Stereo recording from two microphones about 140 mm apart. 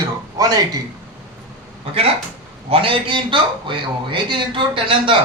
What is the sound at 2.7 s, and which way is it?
A man's voice, 40° right (ahead or behind).